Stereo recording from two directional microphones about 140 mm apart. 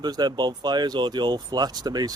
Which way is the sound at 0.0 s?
30° right (ahead or behind).